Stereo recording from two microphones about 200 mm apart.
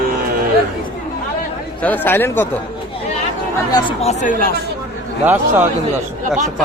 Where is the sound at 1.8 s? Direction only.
10° left (ahead or behind).